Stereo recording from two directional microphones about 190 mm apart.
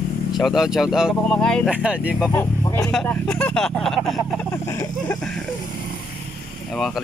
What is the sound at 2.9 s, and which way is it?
Speech, 5° left (ahead or behind).